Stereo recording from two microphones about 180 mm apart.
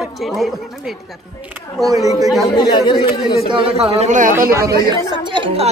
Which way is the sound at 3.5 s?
30° right (ahead or behind).